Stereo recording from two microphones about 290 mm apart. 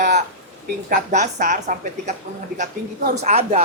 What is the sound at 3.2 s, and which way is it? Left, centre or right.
Speech, right.